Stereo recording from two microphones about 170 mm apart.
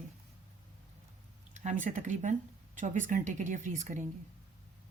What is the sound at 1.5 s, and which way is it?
Speech, 45° right (ahead or behind).